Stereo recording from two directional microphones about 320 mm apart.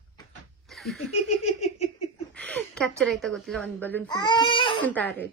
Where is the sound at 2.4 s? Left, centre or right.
Centre.